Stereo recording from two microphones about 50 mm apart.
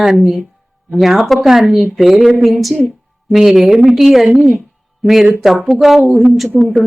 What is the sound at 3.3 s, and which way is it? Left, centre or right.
Speech, centre.